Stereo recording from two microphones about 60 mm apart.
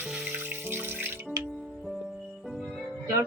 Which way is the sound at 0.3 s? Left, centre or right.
Right.